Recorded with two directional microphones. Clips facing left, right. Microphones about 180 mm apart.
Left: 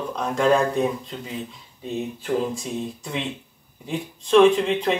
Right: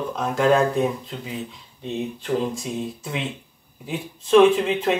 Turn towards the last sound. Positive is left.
turn(degrees=-5)  # may be behind; listen again after turning